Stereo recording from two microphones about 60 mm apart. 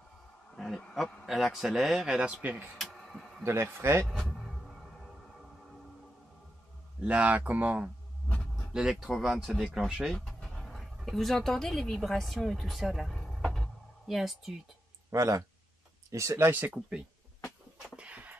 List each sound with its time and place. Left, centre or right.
0.6 s insect: centre
1.2 s a man's voice: centre
2.8 s a sound: centre
3.4 s speech: right
4.1 s a sound: centre
7.1 s speech: right
8.7 s a man's voice: centre
10.1 s speech: centre
13.0 s a sound: centre
15.0 s speech: right
16.3 s speech: right
17.8 s a sound: centre